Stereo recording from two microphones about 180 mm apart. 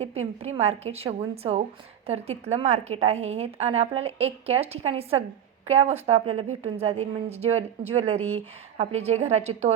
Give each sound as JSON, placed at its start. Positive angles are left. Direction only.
{"t": 0.0, "sound": "a woman's voice", "side_deg": -35}